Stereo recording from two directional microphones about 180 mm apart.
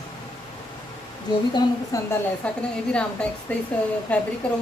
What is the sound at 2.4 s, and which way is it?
A woman's voice, 5° left (ahead or behind).